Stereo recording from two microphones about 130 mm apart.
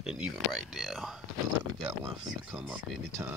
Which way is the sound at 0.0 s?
5° right (ahead or behind).